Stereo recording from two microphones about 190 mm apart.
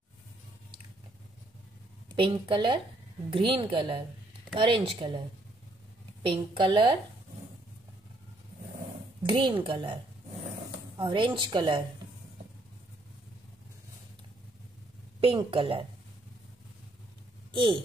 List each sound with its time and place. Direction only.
2.1 s a woman's voice: 25° right (ahead or behind)
6.2 s a woman's voice: 25° right (ahead or behind)
9.2 s a woman's voice: 25° right (ahead or behind)
11.0 s a woman's voice: 25° right (ahead or behind)
15.1 s a woman's voice: 30° right (ahead or behind)